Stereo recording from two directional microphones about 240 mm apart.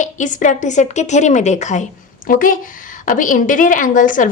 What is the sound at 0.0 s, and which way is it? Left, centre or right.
A woman's voice, left.